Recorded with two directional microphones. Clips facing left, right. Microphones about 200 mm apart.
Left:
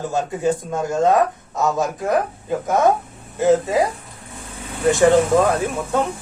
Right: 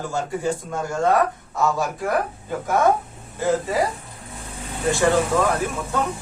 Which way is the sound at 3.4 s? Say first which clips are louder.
Left 5 dB; 20° left (ahead or behind).